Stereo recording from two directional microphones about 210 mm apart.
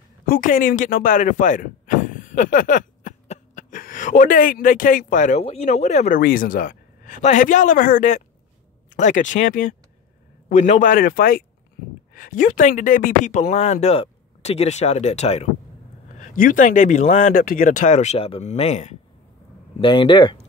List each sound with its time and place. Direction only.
0.3 s speech: 40° left (ahead or behind); by 20.4 s 25° left (ahead or behind)